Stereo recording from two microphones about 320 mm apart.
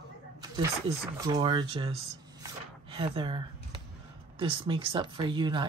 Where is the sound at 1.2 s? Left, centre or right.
Centre.